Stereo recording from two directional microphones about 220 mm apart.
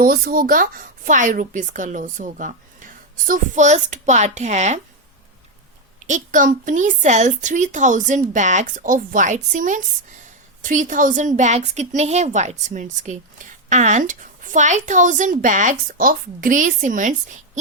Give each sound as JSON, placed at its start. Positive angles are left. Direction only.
{"t": 0.0, "sound": "a woman's voice", "side_deg": -40}
{"t": 6.1, "sound": "a woman's voice", "side_deg": -35}